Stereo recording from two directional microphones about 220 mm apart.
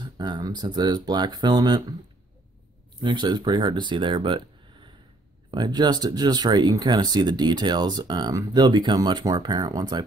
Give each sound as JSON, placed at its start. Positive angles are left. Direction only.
{"t": 0.0, "sound": "speech", "side_deg": -20}
{"t": 3.0, "sound": "speech", "side_deg": -20}
{"t": 5.5, "sound": "speech", "side_deg": -20}